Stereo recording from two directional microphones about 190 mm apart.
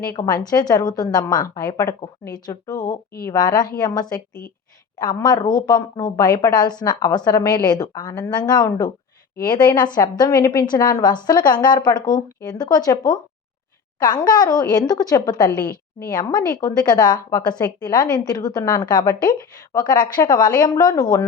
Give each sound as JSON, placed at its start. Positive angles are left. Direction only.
{"t": 0.1, "sound": "a woman's voice", "side_deg": 20}